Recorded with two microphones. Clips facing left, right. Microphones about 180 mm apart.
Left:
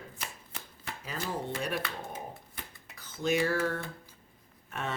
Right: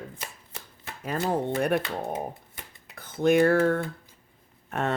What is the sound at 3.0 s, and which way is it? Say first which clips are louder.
Speech: right 9 dB; 55° right (ahead or behind).